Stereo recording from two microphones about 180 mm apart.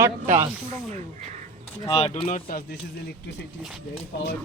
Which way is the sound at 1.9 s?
30° left (ahead or behind).